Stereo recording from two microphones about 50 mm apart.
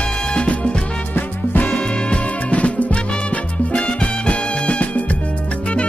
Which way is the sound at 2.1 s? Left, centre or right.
Left.